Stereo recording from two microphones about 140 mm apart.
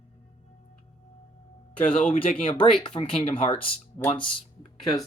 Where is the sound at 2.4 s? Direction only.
40° left (ahead or behind).